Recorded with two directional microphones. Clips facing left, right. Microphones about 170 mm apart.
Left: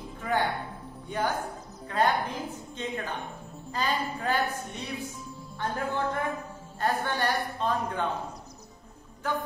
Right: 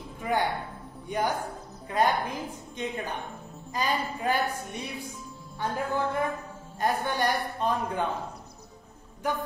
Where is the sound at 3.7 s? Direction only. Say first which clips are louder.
Right 1 dB; 15° right (ahead or behind).